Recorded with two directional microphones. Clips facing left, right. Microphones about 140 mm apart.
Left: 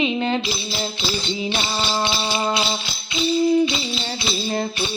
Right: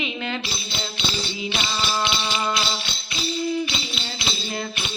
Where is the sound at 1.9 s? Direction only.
30° left (ahead or behind).